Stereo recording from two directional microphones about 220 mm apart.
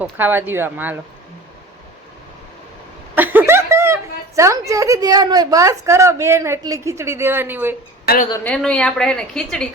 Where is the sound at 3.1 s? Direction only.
10° right (ahead or behind).